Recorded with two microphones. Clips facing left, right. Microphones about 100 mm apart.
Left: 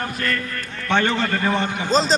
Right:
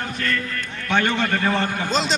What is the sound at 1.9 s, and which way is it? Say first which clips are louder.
Speech: left 6 dB; 35° left (ahead or behind).